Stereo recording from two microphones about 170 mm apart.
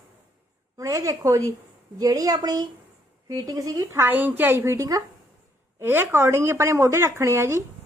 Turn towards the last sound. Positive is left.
turn(degrees=-15)  # may be behind; listen again after turning